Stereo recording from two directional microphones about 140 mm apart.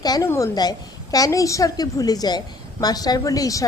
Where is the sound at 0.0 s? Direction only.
30° left (ahead or behind).